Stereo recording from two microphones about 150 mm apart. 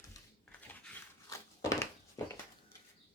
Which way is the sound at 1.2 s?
20° left (ahead or behind).